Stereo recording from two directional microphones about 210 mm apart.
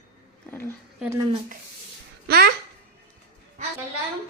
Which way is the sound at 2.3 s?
45° right (ahead or behind).